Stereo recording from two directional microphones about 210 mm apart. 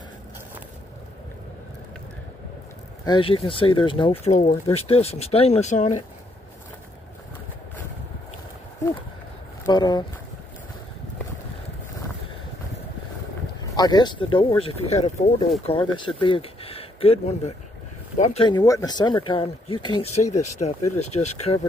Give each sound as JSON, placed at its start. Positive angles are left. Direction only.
{"t": 3.1, "sound": "speech", "side_deg": 25}
{"t": 9.7, "sound": "speech", "side_deg": 20}
{"t": 13.7, "sound": "speech", "side_deg": 20}